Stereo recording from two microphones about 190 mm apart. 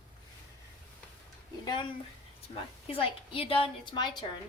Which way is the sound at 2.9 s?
30° left (ahead or behind).